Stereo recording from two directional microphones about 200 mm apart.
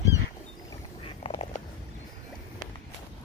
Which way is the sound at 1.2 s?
30° left (ahead or behind).